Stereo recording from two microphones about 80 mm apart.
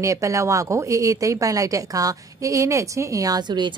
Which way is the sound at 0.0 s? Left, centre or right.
Right.